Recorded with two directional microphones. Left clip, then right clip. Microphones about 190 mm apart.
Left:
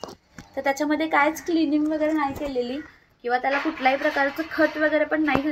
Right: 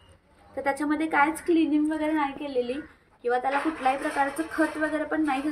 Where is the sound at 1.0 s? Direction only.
35° right (ahead or behind).